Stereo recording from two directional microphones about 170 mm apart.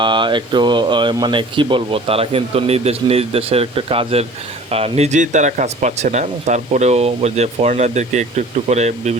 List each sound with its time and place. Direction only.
0.0 s speech: 30° right (ahead or behind)